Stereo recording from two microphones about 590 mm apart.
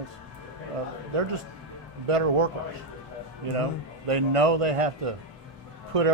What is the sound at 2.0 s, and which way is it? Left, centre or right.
Speech, right.